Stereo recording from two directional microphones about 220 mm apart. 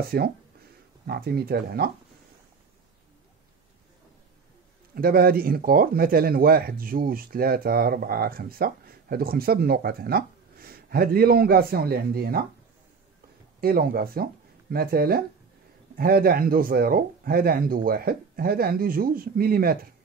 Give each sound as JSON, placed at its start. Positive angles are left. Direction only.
{"t": 0.0, "sound": "speech", "side_deg": -45}
{"t": 4.9, "sound": "speech", "side_deg": -40}
{"t": 13.6, "sound": "speech", "side_deg": -45}